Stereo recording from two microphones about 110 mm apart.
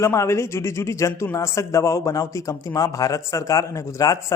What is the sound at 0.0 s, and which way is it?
Speech, 25° left (ahead or behind).